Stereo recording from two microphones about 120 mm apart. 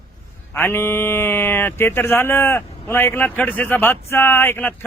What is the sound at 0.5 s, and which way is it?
A man's voice, 20° left (ahead or behind).